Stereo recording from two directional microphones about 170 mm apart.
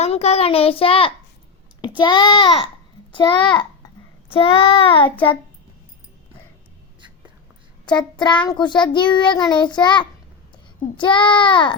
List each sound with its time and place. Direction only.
0.0 s a child's voice: 40° left (ahead or behind)
3.1 s child singing: 30° left (ahead or behind)
4.3 s a child's voice: 35° left (ahead or behind)
7.9 s child singing: 25° left (ahead or behind)